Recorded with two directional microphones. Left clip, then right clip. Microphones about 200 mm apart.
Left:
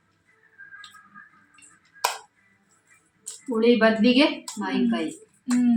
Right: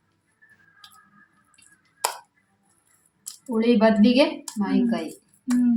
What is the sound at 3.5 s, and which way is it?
A woman's voice, 60° right (ahead or behind).